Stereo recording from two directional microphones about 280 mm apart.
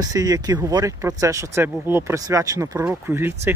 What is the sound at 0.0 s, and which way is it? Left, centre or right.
Speech, centre.